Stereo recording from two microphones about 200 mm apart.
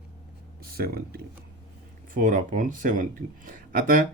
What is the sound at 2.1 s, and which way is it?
Speech, 40° right (ahead or behind).